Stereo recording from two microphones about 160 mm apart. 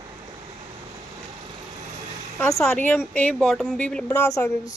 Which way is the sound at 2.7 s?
10° left (ahead or behind).